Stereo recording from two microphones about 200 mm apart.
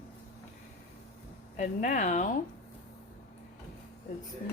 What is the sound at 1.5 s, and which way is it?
Speech, 40° left (ahead or behind).